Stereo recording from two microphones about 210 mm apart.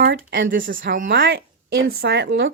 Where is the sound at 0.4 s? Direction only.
40° right (ahead or behind).